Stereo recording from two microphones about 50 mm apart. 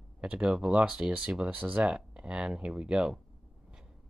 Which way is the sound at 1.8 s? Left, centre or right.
Centre.